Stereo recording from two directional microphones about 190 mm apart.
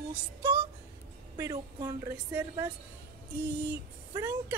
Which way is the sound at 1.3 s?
20° right (ahead or behind).